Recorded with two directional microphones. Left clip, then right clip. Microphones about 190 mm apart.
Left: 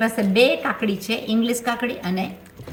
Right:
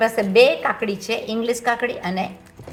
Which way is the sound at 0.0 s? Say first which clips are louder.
Right 3 dB; 40° right (ahead or behind).